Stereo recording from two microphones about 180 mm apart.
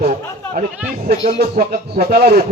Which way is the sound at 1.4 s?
55° right (ahead or behind).